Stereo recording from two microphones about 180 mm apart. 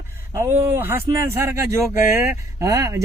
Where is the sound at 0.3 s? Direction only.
15° right (ahead or behind).